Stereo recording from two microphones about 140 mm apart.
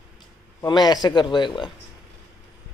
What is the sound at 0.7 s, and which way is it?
Speech, 30° left (ahead or behind).